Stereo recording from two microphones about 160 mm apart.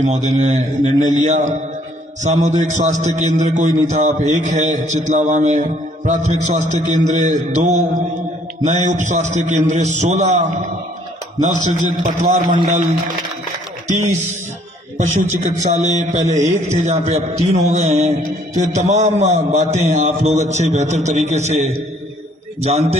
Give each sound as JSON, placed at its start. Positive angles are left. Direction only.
{"t": 0.0, "sound": "a man's voice", "side_deg": -50}